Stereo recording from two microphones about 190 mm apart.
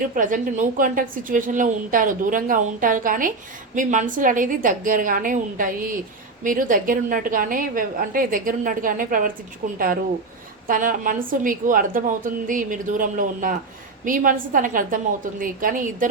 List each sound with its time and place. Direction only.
0.1 s a woman's voice: 45° right (ahead or behind)